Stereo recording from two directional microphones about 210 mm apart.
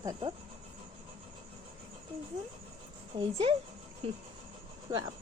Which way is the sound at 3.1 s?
20° right (ahead or behind).